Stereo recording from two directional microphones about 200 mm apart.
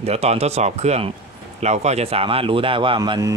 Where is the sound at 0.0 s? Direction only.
30° right (ahead or behind).